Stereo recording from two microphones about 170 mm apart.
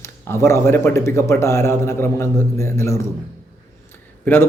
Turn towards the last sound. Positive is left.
turn(degrees=10)  # may be behind; listen again after turning